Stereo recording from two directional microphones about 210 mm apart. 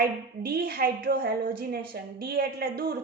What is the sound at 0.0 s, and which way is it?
A woman's voice, 45° right (ahead or behind).